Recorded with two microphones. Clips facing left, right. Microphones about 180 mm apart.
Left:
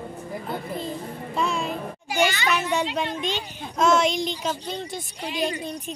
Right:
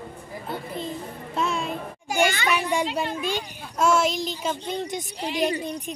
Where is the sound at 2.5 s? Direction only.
10° right (ahead or behind).